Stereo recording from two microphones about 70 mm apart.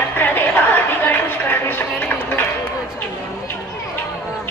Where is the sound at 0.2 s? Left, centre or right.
Left.